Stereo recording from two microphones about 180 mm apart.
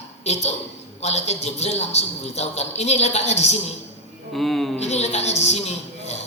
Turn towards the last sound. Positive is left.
turn(degrees=35)  # may be behind; listen again after turning